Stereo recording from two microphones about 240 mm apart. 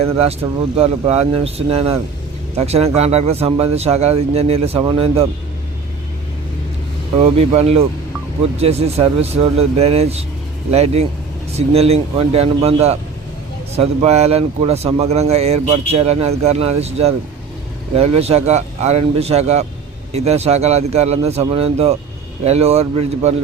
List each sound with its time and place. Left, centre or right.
0.8 s speech: right
7.3 s speech: right